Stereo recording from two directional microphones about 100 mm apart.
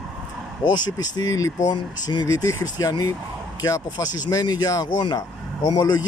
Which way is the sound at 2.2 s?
35° left (ahead or behind).